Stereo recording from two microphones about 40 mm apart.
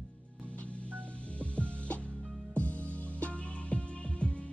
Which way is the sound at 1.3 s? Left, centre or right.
Left.